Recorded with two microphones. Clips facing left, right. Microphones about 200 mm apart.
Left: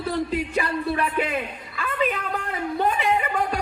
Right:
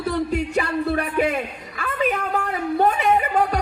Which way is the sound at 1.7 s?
45° right (ahead or behind).